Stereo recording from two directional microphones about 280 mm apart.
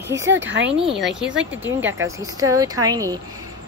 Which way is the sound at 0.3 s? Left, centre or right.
Right.